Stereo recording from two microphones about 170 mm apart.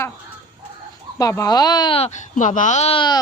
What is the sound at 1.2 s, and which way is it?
Speech, 20° left (ahead or behind).